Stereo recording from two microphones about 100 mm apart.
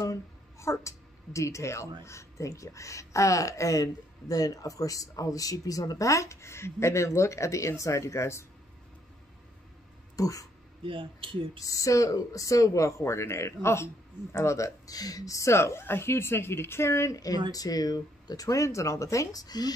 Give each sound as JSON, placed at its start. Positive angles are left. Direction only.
{"t": 0.0, "sound": "a woman's voice", "side_deg": 30}
{"t": 10.1, "sound": "speech", "side_deg": 35}
{"t": 10.8, "sound": "speech", "side_deg": -60}
{"t": 11.6, "sound": "a woman's voice", "side_deg": 35}